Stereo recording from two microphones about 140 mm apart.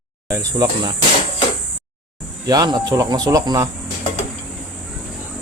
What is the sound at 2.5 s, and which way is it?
Speech, 30° right (ahead or behind).